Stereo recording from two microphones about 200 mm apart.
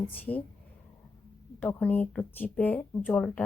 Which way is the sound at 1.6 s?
5° left (ahead or behind).